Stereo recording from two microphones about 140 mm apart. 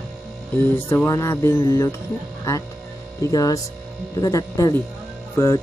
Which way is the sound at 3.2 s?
25° left (ahead or behind).